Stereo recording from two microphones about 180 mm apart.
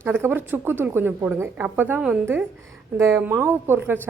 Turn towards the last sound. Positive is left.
turn(degrees=-10)  # may be behind; listen again after turning